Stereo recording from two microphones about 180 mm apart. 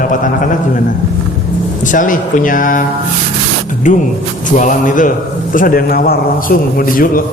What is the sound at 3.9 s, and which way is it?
A man's voice, 45° left (ahead or behind).